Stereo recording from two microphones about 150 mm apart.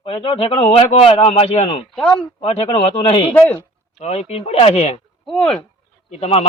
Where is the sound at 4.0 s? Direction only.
50° left (ahead or behind).